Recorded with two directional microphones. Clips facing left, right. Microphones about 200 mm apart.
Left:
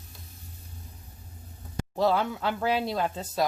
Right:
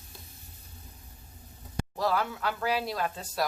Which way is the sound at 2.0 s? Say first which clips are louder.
Left 4 dB; 25° left (ahead or behind).